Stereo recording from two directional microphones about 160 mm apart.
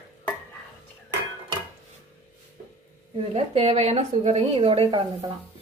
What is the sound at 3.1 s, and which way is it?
A woman's voice, 40° right (ahead or behind).